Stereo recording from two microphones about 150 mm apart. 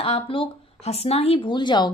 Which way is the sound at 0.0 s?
40° left (ahead or behind).